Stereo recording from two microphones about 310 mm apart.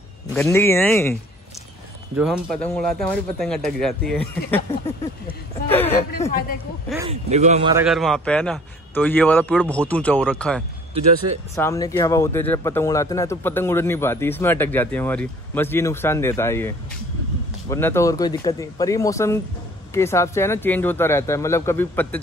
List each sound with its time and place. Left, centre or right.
0.3 s speech: centre
2.1 s a man's voice: centre
5.7 s speech: centre
7.1 s speech: right
7.7 s a man's voice: centre